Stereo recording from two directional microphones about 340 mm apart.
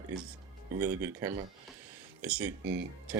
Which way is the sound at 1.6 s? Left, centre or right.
Centre.